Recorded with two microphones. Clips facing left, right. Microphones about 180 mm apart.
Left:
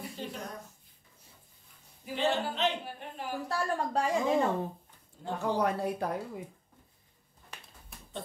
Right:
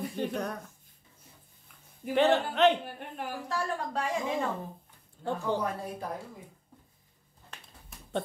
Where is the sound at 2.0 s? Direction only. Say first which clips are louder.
Right 6 dB; 60° right (ahead or behind).